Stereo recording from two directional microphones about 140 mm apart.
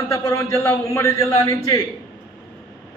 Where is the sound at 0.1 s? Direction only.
20° left (ahead or behind).